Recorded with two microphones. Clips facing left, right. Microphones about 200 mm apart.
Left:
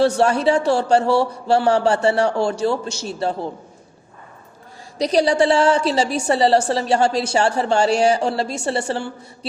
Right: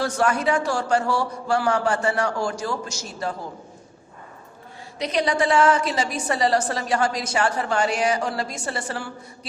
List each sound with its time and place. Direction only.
0.2 s a man's voice: 30° left (ahead or behind)
4.9 s a man's voice: 35° left (ahead or behind)